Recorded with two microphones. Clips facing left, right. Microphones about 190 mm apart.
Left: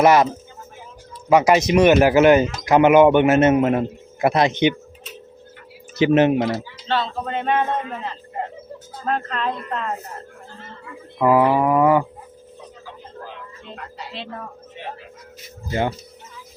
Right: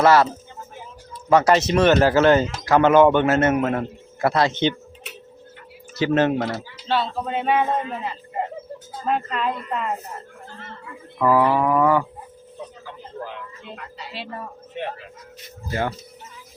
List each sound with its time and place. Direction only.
0.0 s speech: 15° left (ahead or behind)
1.3 s speech: 10° left (ahead or behind)
6.0 s speech: 20° left (ahead or behind)
6.8 s speech: 10° right (ahead or behind)
11.2 s speech: 20° left (ahead or behind)
14.1 s speech: 5° right (ahead or behind)
14.8 s speech: 60° right (ahead or behind)
15.7 s speech: 20° left (ahead or behind)